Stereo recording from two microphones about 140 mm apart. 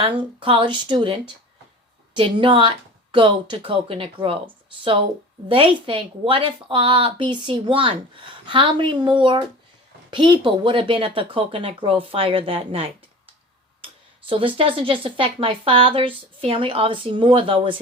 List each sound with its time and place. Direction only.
0.0 s speech: 35° right (ahead or behind)